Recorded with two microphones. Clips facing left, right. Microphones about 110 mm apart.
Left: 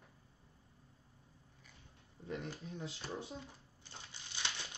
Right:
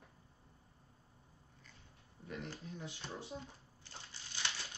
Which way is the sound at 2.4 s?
20° left (ahead or behind).